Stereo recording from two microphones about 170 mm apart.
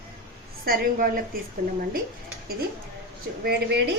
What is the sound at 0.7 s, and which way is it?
Speech, 60° right (ahead or behind).